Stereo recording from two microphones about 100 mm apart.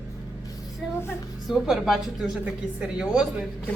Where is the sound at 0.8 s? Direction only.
Centre (ahead or behind).